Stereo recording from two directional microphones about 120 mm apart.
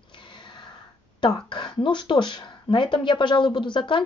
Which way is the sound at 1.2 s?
40° left (ahead or behind).